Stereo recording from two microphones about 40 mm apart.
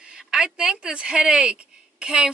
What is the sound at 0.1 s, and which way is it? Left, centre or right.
A woman's voice, right.